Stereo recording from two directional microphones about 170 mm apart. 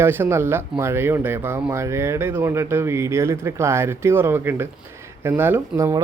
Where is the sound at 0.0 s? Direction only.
15° right (ahead or behind).